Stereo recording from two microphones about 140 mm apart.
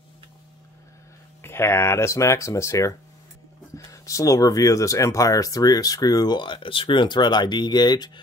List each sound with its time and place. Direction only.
1.4 s speech: 20° left (ahead or behind)